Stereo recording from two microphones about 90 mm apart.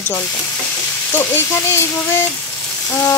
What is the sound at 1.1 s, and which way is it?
Sizzle, 25° left (ahead or behind).